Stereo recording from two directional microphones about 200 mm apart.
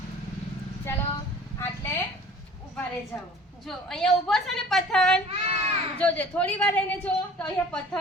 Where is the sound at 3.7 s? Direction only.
Centre (ahead or behind).